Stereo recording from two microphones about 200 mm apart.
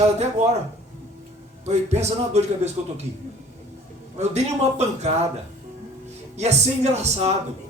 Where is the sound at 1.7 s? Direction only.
35° right (ahead or behind).